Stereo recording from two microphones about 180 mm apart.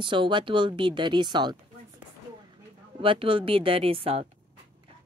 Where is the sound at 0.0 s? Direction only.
25° right (ahead or behind).